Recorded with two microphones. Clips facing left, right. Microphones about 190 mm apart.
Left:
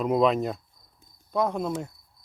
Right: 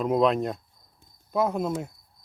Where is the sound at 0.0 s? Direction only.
Centre (ahead or behind).